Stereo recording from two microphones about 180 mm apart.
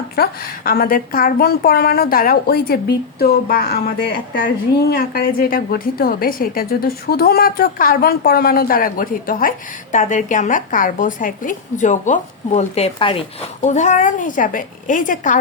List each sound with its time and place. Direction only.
0.2 s a woman's voice: 55° left (ahead or behind); by 13.2 s 30° left (ahead or behind)
13.6 s a woman's voice: 40° left (ahead or behind)